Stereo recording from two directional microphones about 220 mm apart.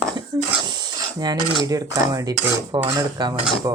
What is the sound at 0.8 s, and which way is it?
Filing, 20° right (ahead or behind).